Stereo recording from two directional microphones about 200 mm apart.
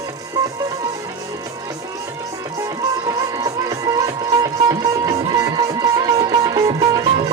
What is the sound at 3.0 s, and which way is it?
Music, 20° right (ahead or behind).